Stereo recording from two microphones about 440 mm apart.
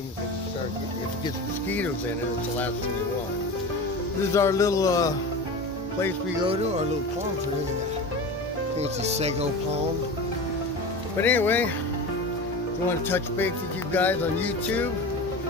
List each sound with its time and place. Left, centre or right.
4.3 s speech: centre
8.7 s speech: centre
11.1 s music: centre
13.9 s music: centre